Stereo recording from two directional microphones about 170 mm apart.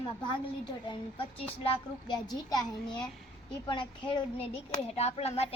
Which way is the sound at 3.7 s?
30° left (ahead or behind).